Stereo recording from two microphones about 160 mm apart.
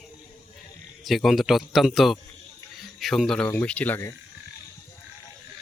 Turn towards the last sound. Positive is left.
turn(degrees=15)  # may be behind; listen again after turning